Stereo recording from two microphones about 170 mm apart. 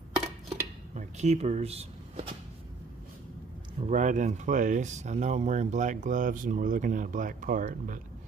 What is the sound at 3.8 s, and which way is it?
Speech, 45° right (ahead or behind).